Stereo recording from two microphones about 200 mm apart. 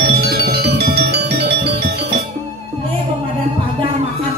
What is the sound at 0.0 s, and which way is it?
Music, 50° right (ahead or behind).